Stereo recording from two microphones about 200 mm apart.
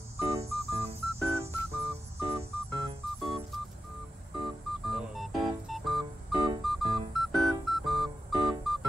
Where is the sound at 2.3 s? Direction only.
25° right (ahead or behind).